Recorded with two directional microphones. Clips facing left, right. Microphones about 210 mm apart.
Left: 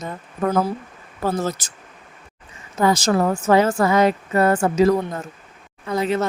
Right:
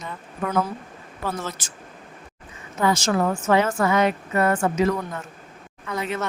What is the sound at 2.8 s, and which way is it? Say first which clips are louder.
A woman's voice: left 3 dB; 35° left (ahead or behind).